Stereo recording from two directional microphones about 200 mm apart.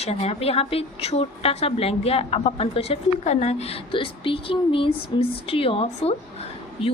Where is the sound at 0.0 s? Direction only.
30° left (ahead or behind).